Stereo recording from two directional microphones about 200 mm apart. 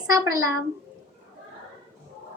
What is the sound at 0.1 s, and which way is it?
Speech, 15° right (ahead or behind).